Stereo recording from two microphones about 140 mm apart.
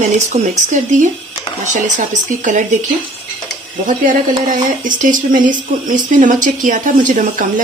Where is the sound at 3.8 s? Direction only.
70° right (ahead or behind).